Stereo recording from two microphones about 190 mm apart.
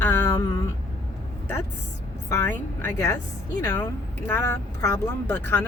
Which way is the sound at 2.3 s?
10° left (ahead or behind).